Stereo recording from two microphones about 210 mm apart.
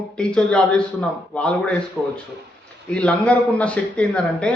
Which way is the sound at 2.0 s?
10° right (ahead or behind).